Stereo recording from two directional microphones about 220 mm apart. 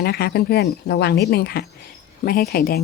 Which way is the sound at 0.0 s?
45° left (ahead or behind).